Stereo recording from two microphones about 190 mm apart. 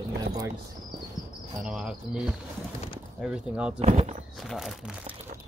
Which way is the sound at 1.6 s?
5° right (ahead or behind).